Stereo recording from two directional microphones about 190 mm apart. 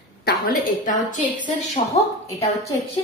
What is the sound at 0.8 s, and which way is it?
Speech, 40° left (ahead or behind).